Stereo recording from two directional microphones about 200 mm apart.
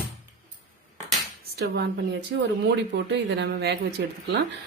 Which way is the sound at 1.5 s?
55° right (ahead or behind).